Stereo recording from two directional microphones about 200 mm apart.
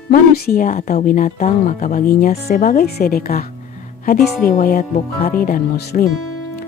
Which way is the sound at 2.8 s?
50° left (ahead or behind).